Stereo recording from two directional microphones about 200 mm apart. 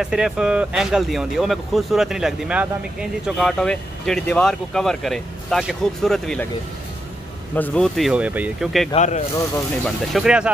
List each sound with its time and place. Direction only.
0.0 s speech: 5° right (ahead or behind)
7.5 s speech: 5° left (ahead or behind)
8.9 s speech: 35° left (ahead or behind)
9.8 s speech: centre (ahead or behind)